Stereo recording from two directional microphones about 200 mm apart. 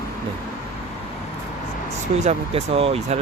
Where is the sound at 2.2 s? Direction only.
30° right (ahead or behind).